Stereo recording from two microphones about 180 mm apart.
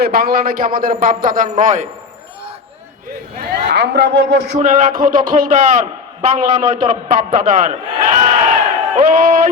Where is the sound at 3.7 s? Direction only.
70° right (ahead or behind).